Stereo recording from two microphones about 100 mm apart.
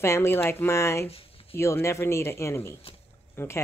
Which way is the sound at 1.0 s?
75° left (ahead or behind).